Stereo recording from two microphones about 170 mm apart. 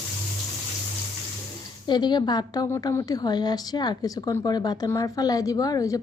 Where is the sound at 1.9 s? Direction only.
25° left (ahead or behind).